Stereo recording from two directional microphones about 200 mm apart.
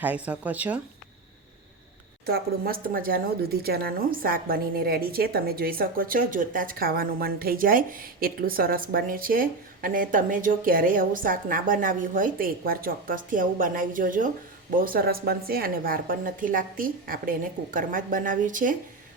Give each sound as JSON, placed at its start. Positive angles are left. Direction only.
{"t": 0.0, "sound": "speech", "side_deg": -5}
{"t": 2.2, "sound": "speech", "side_deg": -50}